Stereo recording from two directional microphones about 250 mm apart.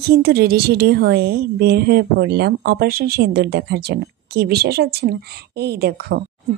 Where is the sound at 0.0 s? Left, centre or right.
Right.